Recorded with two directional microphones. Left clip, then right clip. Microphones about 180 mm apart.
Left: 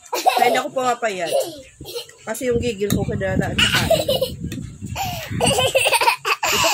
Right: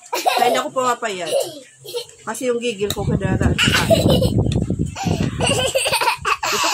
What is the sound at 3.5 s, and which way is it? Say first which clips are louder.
Speech: right 2 dB; centre (ahead or behind).